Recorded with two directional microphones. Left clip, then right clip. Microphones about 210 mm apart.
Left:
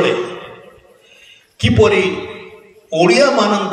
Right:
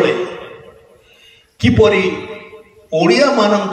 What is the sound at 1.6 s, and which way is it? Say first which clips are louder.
Speech: right 1 dB; 40° left (ahead or behind).